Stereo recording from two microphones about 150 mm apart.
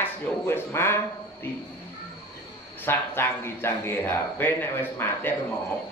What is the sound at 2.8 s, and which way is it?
Speech, 15° left (ahead or behind).